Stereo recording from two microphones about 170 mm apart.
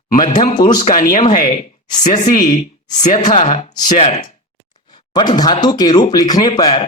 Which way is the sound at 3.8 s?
40° left (ahead or behind).